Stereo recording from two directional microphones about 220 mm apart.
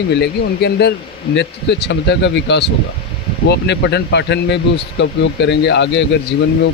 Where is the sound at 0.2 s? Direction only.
50° left (ahead or behind).